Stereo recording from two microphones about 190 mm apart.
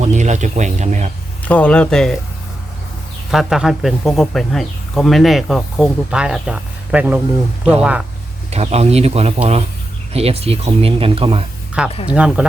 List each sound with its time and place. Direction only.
0.0 s speech: 40° right (ahead or behind)
1.5 s speech: 5° left (ahead or behind)
3.3 s speech: centre (ahead or behind)
8.4 s speech: 35° right (ahead or behind)
12.0 s speech: 5° right (ahead or behind)